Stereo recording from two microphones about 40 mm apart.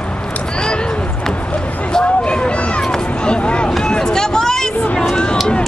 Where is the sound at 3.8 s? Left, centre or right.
Centre.